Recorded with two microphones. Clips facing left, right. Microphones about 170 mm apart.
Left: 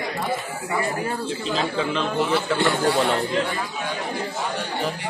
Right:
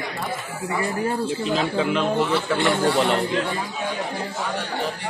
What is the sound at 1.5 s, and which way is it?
Speech, 10° right (ahead or behind).